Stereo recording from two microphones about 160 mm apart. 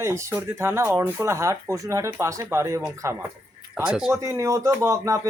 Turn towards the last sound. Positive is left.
turn(degrees=-20)  # may be behind; listen again after turning